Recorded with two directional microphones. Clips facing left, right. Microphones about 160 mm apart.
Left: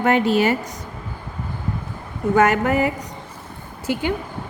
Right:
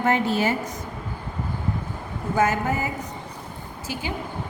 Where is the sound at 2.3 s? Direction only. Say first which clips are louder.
Left 5 dB; 65° left (ahead or behind).